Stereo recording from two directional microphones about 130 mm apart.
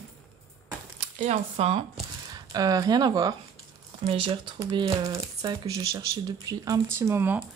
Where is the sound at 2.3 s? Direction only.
30° right (ahead or behind).